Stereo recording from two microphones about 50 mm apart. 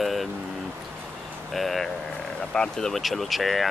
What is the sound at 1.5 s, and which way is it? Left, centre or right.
Speech, centre.